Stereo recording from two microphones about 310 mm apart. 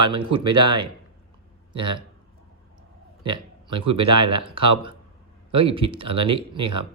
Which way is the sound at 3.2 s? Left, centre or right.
Centre.